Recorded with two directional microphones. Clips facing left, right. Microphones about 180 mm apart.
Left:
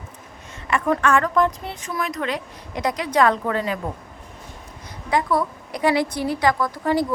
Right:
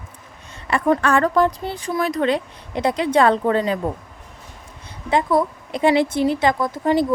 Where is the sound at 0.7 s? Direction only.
35° right (ahead or behind).